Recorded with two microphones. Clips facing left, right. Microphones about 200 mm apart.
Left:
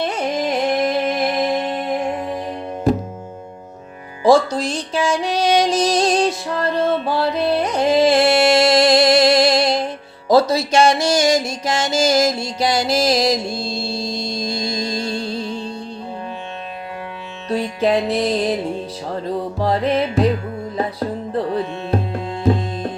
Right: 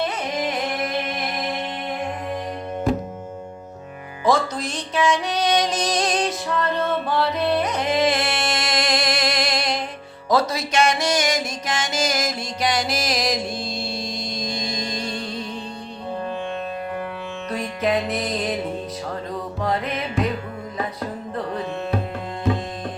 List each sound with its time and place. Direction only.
0.4 s music: 35° left (ahead or behind)
4.2 s music: 30° left (ahead or behind)
17.5 s music: 30° left (ahead or behind)
19.5 s music: 30° left (ahead or behind)